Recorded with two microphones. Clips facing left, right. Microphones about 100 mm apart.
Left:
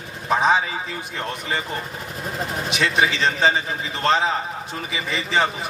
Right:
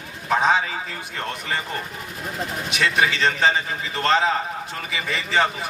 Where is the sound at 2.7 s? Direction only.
20° left (ahead or behind).